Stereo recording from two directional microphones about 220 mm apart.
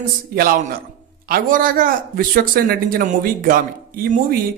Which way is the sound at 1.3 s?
40° right (ahead or behind).